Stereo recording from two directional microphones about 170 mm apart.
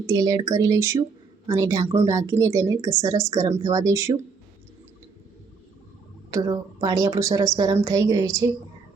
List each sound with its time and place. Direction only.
0.0 s speech: 20° right (ahead or behind)
6.3 s speech: 25° right (ahead or behind)